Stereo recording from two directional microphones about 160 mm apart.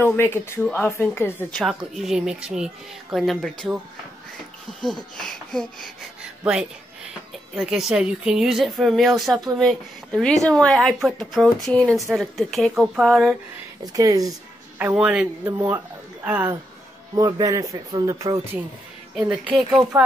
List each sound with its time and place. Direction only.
0.1 s a woman's voice: 15° left (ahead or behind)
1.6 s speech: centre (ahead or behind)
4.8 s speech: 5° left (ahead or behind)
7.5 s speech: 5° right (ahead or behind)
13.9 s speech: 20° right (ahead or behind)
14.8 s a man's voice: 10° right (ahead or behind)
17.1 s a man's voice: 20° right (ahead or behind); by 20.0 s 5° right (ahead or behind)